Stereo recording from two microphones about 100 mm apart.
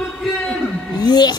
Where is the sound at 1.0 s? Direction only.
45° left (ahead or behind).